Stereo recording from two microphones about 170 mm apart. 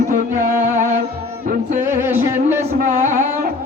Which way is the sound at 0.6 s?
45° right (ahead or behind).